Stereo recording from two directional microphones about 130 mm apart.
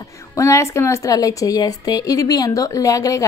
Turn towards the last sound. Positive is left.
turn(degrees=25)  # may be behind; listen again after turning